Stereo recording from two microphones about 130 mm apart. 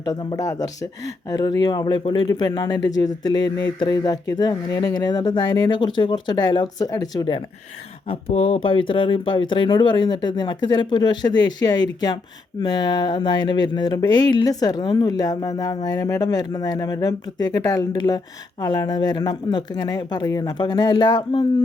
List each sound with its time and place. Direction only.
0.0 s speech: 35° left (ahead or behind)
8.3 s speech: 55° left (ahead or behind); by 21.4 s 35° left (ahead or behind)